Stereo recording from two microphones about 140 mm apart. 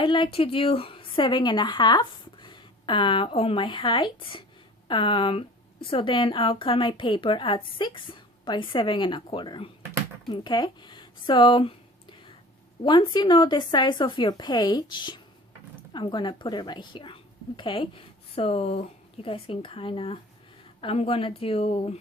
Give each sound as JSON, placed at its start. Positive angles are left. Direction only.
{"t": 0.0, "sound": "a woman's voice", "side_deg": 35}
{"t": 10.2, "sound": "a sound", "side_deg": 35}
{"t": 12.8, "sound": "a woman's voice", "side_deg": 35}